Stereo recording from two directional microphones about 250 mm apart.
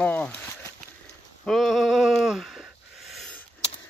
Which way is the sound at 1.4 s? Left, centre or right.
Centre.